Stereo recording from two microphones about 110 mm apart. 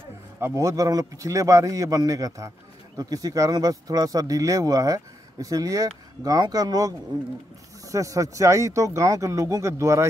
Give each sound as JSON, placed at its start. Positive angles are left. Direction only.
{"t": 0.4, "sound": "speech", "side_deg": -30}